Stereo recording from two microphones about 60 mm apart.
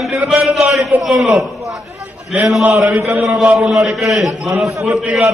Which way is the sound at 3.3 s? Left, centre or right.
Centre.